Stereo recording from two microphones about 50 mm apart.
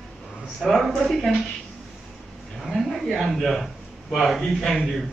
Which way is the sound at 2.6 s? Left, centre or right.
Centre.